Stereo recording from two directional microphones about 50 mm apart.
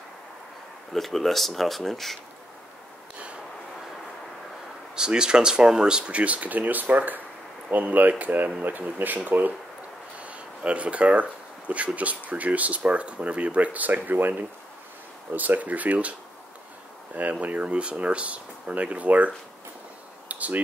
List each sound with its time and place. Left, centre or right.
0.9 s speech: centre
4.9 s speech: centre; by 14.3 s right
15.3 s speech: right
20.2 s a sound: right